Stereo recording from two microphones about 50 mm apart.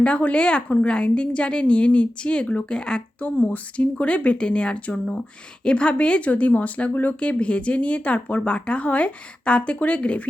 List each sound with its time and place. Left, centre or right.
0.0 s speech: left
3.2 s speech: left